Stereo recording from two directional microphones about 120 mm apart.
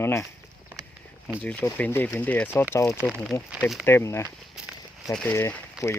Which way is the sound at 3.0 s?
Centre (ahead or behind).